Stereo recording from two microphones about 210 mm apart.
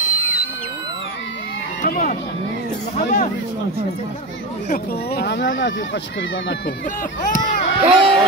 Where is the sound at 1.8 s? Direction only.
45° left (ahead or behind).